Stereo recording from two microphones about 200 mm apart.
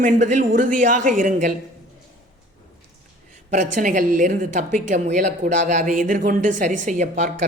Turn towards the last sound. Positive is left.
turn(degrees=-40)  # may be behind; listen again after turning